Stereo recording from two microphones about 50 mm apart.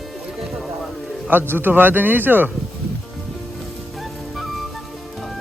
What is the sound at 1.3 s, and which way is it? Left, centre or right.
Speech, right.